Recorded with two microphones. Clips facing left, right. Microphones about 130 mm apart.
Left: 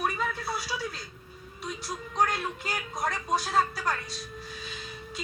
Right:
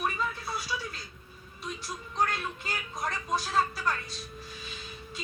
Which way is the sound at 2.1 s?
35° left (ahead or behind).